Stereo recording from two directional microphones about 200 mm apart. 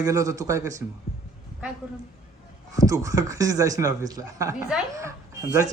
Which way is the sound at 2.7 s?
15° right (ahead or behind).